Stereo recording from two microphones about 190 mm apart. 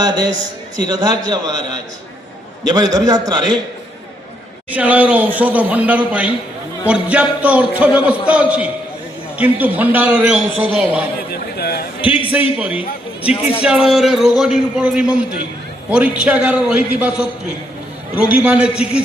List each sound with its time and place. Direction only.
0.0 s a man's voice: 20° right (ahead or behind)
4.7 s a man's voice: 10° right (ahead or behind)
11.3 s a sound: 55° left (ahead or behind)
12.0 s a man's voice: 30° left (ahead or behind)
13.6 s a man's voice: 5° right (ahead or behind)